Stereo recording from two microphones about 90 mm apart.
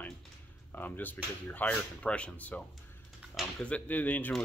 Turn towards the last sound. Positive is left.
turn(degrees=20)  # may be behind; listen again after turning